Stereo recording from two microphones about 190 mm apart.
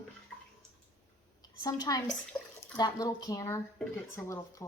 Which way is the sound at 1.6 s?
20° left (ahead or behind).